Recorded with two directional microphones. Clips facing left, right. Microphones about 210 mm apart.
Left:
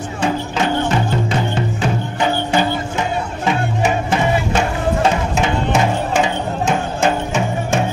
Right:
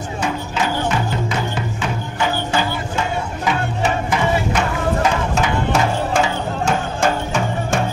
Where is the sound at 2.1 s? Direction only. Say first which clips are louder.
Left 2 dB; 20° left (ahead or behind).